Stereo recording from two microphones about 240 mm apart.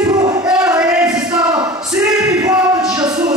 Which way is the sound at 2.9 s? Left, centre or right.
Centre.